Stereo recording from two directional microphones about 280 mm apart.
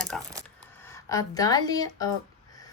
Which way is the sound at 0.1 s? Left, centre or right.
Centre.